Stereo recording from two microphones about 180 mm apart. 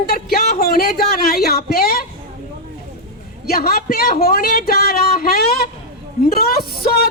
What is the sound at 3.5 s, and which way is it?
Speech, 55° left (ahead or behind).